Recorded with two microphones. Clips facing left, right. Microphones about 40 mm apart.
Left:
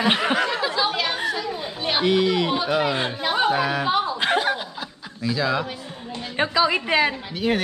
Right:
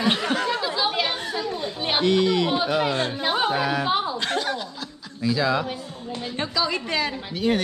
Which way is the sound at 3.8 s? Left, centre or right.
Centre.